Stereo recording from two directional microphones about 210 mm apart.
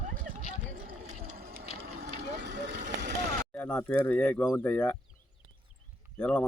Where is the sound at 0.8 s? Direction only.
40° right (ahead or behind).